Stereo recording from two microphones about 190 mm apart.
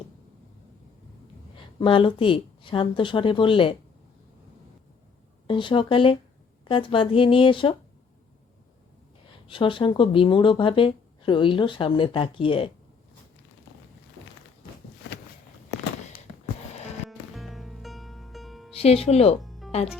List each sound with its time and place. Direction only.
1.5 s speech: 30° left (ahead or behind)
5.5 s speech: 25° left (ahead or behind)
9.5 s speech: 25° left (ahead or behind)
17.1 s music: centre (ahead or behind)
18.7 s speech: 30° left (ahead or behind)
19.4 s music: centre (ahead or behind)